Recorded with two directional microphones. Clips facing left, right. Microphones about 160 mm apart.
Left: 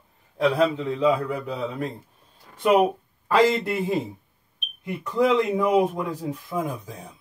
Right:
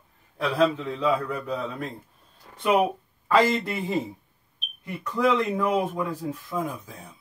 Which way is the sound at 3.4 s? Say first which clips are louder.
Left 7 dB; 10° left (ahead or behind).